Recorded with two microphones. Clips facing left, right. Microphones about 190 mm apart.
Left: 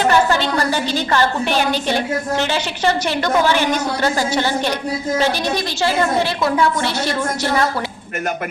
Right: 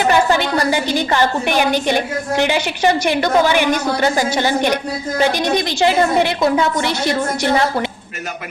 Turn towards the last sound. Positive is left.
turn(degrees=-15)  # may be behind; listen again after turning